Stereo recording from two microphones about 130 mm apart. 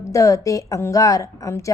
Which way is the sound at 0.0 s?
25° left (ahead or behind).